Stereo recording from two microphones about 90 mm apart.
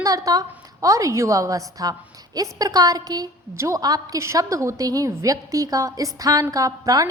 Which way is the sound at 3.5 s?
30° right (ahead or behind).